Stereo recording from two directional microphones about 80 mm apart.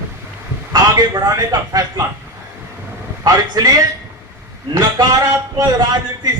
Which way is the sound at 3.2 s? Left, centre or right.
Right.